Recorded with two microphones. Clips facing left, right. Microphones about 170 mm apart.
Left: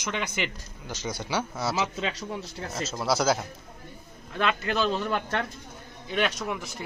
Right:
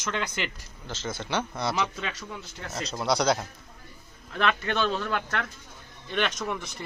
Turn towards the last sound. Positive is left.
turn(degrees=5)  # may be behind; listen again after turning